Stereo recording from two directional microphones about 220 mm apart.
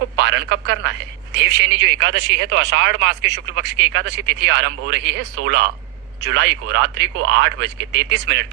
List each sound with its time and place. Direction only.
0.2 s speech: 50° right (ahead or behind)